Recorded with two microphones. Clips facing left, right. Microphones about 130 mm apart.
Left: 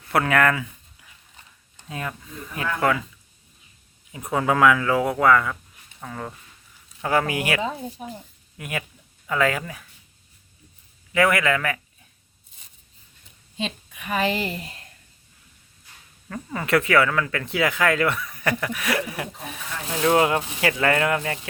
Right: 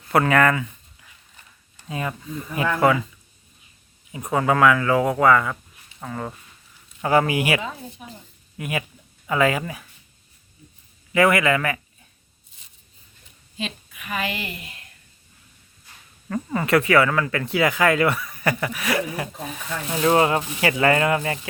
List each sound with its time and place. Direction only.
0.1 s speech: centre (ahead or behind)
1.9 s speech: 5° right (ahead or behind)
4.3 s speech: centre (ahead or behind)
7.6 s a woman's voice: 30° left (ahead or behind)
8.5 s speech: centre (ahead or behind)
11.1 s speech: centre (ahead or behind)
13.6 s a woman's voice: 30° left (ahead or behind)
16.3 s speech: 5° right (ahead or behind)